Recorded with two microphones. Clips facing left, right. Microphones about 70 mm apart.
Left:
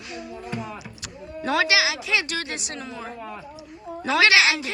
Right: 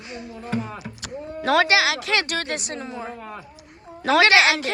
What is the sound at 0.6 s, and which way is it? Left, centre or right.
A woman's voice, right.